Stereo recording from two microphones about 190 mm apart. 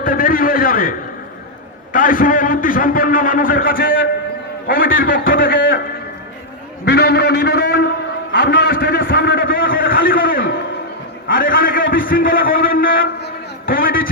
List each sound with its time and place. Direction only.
0.0 s a man's voice: 45° left (ahead or behind)
6.8 s a man's voice: 60° left (ahead or behind)
9.6 s a sound: 50° left (ahead or behind)
11.3 s a man's voice: 45° left (ahead or behind)